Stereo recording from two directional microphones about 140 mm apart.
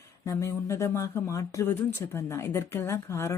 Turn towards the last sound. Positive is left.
turn(degrees=20)  # may be behind; listen again after turning